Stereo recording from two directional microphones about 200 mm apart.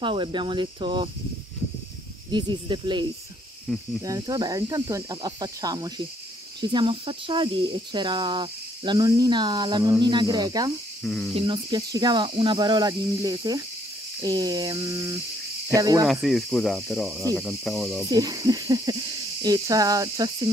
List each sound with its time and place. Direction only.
0.0 s speech: 25° right (ahead or behind)
2.3 s speech: 25° right (ahead or behind)
11.1 s speech: centre (ahead or behind)
11.3 s speech: 25° right (ahead or behind)
15.7 s cricket: 15° right (ahead or behind)
16.1 s speech: centre (ahead or behind)
18.1 s speech: 20° right (ahead or behind)
19.4 s cricket: 20° right (ahead or behind)